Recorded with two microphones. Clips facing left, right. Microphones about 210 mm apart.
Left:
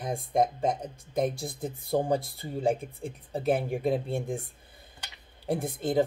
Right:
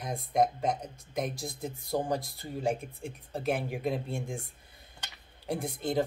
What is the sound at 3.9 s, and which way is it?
Speech, 30° left (ahead or behind).